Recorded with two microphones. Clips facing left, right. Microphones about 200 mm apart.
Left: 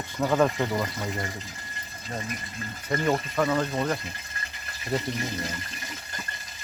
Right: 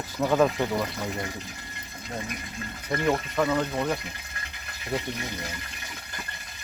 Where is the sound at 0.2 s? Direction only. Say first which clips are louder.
Right 1 dB; centre (ahead or behind).